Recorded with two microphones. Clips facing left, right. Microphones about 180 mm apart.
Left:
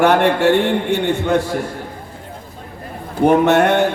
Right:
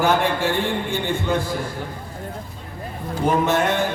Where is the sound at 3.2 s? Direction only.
65° left (ahead or behind).